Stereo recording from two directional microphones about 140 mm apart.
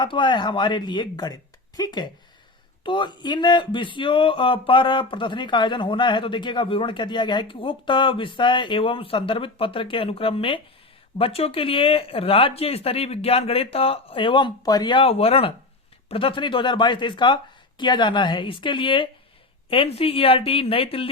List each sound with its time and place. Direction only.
0.0 s speech: 35° left (ahead or behind)